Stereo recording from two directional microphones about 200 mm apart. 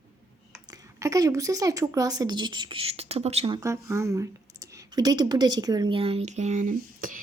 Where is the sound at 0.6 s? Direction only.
15° right (ahead or behind).